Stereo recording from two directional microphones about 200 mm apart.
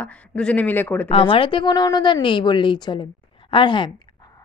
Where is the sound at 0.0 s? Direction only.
5° left (ahead or behind).